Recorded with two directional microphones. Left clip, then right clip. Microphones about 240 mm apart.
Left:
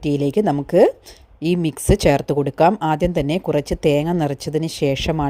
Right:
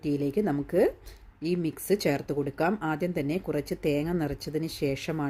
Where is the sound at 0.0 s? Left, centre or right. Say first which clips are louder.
Left 10 dB; left.